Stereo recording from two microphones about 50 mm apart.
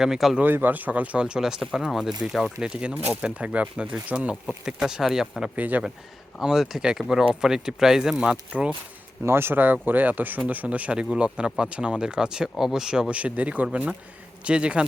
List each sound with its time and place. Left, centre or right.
0.0 s speech: centre
0.4 s speech: right
1.2 s speech: centre
5.5 s speech: right
6.4 s speech: centre
9.2 s a man's voice: right